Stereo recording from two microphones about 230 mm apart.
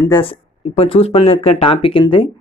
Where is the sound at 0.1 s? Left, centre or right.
Left.